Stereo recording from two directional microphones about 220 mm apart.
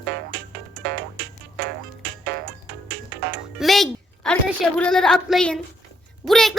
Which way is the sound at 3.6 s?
Centre (ahead or behind).